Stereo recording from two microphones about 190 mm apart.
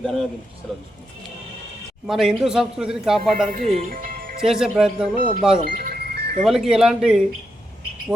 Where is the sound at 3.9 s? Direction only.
50° right (ahead or behind).